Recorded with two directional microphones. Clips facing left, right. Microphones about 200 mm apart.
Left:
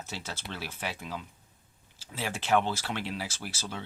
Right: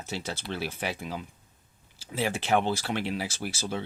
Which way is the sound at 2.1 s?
20° right (ahead or behind).